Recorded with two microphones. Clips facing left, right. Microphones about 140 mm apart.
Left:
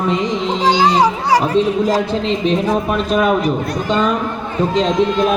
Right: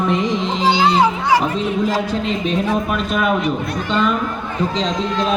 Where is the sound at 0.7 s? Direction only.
40° left (ahead or behind).